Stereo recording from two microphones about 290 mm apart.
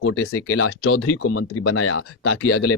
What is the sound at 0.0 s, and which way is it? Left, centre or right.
Speech, left.